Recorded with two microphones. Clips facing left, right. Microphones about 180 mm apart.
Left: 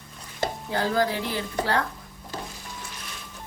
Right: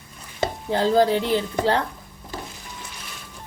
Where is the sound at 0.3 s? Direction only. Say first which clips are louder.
Right 4 dB; 25° right (ahead or behind).